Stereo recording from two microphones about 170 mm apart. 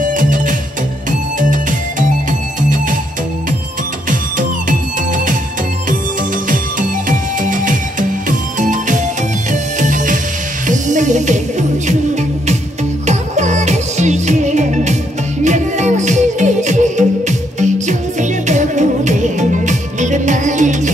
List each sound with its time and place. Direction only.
0.1 s music: 50° right (ahead or behind)
4.1 s music: 50° right (ahead or behind)
6.5 s music: 50° right (ahead or behind)